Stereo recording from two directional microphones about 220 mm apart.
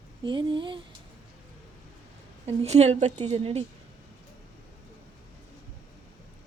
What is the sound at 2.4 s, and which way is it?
A woman's voice, 30° right (ahead or behind).